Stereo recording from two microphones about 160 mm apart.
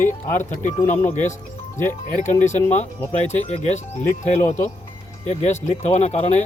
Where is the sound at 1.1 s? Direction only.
50° left (ahead or behind).